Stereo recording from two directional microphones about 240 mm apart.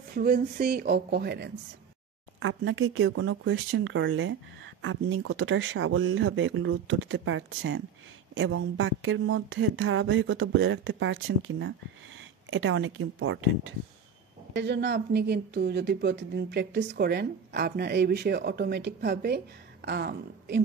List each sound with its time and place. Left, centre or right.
0.1 s speech: right
2.4 s speech: right